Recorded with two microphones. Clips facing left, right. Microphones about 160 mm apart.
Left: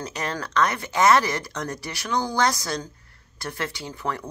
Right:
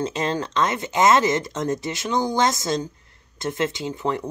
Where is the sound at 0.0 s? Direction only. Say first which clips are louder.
Right 6 dB; 25° right (ahead or behind).